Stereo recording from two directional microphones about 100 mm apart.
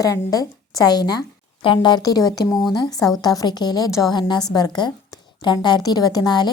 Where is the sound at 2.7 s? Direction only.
40° left (ahead or behind).